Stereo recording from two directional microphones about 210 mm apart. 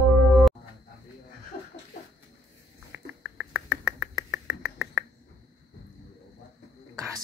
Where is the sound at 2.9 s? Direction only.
5° right (ahead or behind).